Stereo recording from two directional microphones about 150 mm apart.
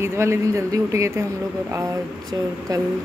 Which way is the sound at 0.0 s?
20° right (ahead or behind).